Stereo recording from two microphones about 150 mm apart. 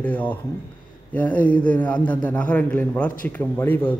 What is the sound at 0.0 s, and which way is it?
A man's voice, 10° left (ahead or behind).